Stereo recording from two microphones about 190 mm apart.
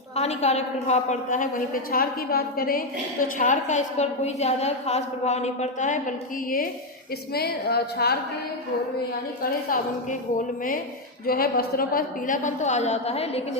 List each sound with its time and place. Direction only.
0.2 s a woman's voice: 35° left (ahead or behind)
7.3 s a woman's voice: 55° left (ahead or behind)
9.4 s a woman's voice: 45° left (ahead or behind)